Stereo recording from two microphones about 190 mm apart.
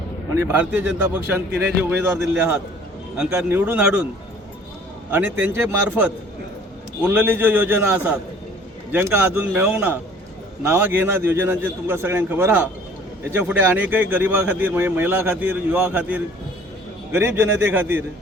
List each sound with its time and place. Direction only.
0.5 s speech: 5° right (ahead or behind)
1.5 s speech: 60° right (ahead or behind)
1.8 s speech: 10° right (ahead or behind)
5.1 s speech: 10° right (ahead or behind)